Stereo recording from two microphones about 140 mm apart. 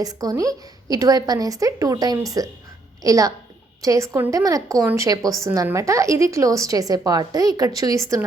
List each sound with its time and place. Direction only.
0.0 s a woman's voice: 25° right (ahead or behind)